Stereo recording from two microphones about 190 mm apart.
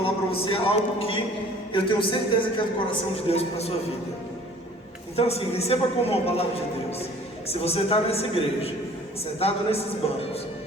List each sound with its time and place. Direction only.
0.0 s a man's voice: 30° left (ahead or behind)
5.1 s a man's voice: 30° left (ahead or behind)
7.4 s a man's voice: 30° left (ahead or behind)